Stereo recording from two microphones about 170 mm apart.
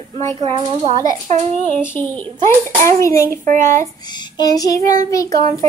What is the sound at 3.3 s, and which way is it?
Speech, 50° right (ahead or behind).